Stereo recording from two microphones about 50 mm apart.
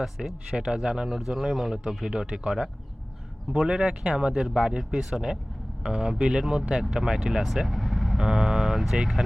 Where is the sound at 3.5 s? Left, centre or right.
Centre.